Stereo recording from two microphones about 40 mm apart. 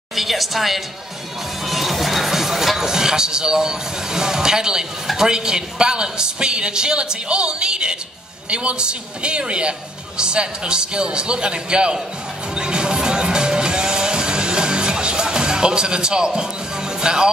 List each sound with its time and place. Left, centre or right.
0.1 s a woman's voice: centre
1.7 s music: centre
5.0 s a man's voice: centre
12.5 s music: centre